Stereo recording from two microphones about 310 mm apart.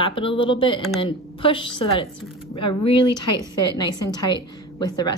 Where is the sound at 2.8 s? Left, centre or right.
Centre.